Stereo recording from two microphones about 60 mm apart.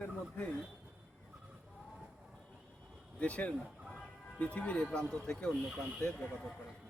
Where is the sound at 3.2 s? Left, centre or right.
Left.